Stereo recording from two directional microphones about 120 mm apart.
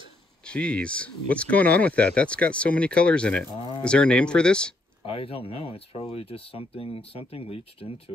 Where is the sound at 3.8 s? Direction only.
10° left (ahead or behind).